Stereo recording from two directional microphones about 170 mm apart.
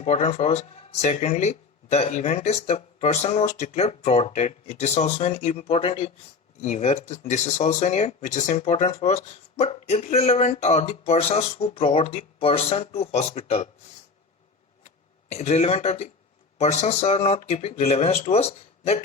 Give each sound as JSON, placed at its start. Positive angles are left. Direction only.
{"t": 0.0, "sound": "speech", "side_deg": 40}
{"t": 14.8, "sound": "speech", "side_deg": 40}